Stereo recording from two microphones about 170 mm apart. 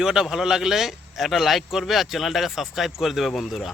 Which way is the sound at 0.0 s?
5° right (ahead or behind).